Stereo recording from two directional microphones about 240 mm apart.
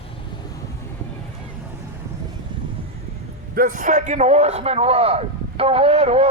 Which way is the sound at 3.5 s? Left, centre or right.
Right.